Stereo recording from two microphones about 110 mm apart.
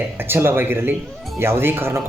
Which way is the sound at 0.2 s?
20° right (ahead or behind).